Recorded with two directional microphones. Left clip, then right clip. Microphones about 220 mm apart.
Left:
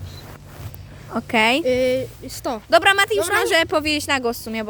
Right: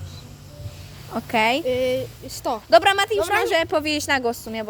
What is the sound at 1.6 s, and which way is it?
Speech, 50° left (ahead or behind).